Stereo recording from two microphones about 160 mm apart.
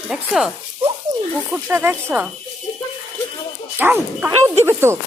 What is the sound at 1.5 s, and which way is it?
Speech, 10° right (ahead or behind).